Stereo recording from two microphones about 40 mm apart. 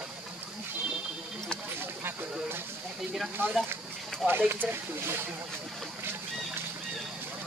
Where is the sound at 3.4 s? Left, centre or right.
Right.